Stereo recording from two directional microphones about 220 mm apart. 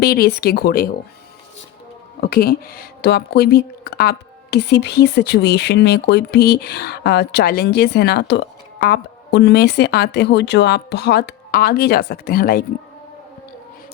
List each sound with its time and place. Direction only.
0.0 s speech: 45° left (ahead or behind)
2.2 s speech: 45° left (ahead or behind)